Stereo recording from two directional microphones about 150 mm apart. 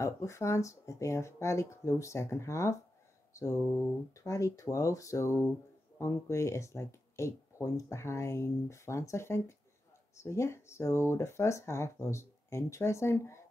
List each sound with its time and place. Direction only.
0.0 s speech: 20° left (ahead or behind)